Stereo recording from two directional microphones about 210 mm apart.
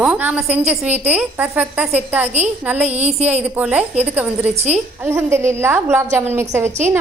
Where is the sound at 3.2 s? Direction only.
5° right (ahead or behind).